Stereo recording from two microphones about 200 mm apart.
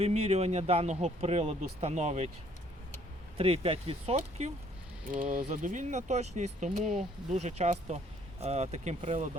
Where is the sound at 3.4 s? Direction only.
30° right (ahead or behind).